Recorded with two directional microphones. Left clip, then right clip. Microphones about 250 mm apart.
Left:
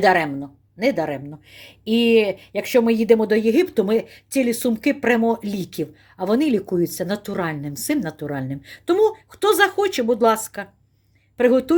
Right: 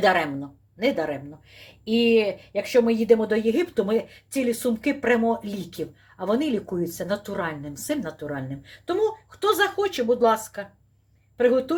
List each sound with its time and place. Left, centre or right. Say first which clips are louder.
0.0 s speech: left 4 dB; left